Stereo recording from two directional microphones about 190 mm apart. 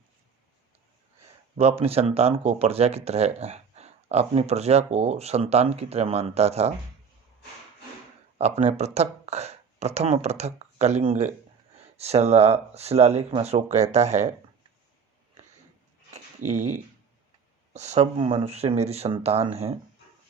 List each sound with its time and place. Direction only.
1.5 s speech: 30° right (ahead or behind)
8.4 s speech: 35° right (ahead or behind)
16.1 s a sound: 35° right (ahead or behind)
17.7 s speech: 35° right (ahead or behind)